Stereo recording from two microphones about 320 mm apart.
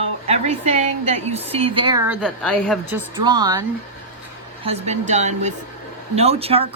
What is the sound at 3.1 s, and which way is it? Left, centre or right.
A woman's voice, centre.